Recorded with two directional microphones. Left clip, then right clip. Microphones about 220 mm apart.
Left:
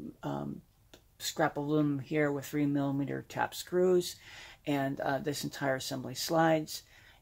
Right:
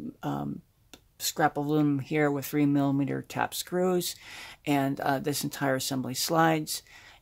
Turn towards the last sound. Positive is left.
turn(degrees=-45)  # may be behind; listen again after turning